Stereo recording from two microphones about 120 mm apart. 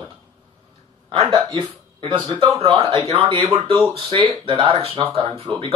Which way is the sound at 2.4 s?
55° right (ahead or behind).